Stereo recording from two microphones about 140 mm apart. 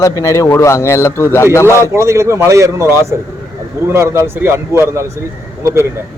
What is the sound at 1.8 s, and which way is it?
Speech, 20° right (ahead or behind).